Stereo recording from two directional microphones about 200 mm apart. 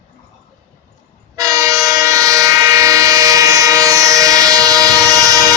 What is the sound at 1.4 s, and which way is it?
Train, 15° right (ahead or behind).